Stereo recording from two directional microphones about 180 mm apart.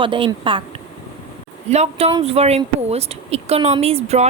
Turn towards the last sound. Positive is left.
turn(degrees=-35)  # may be behind; listen again after turning